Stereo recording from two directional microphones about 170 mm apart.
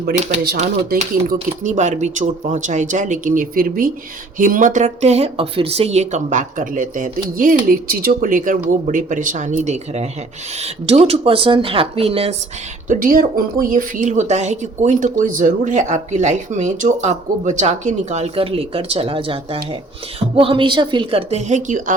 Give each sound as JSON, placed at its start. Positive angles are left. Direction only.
{"t": 0.5, "sound": "a woman's voice", "side_deg": -40}
{"t": 12.9, "sound": "a woman's voice", "side_deg": -55}